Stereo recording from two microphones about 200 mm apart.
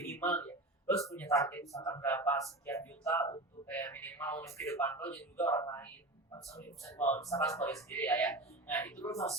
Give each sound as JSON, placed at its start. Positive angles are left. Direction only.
{"t": 0.2, "sound": "speech", "side_deg": 10}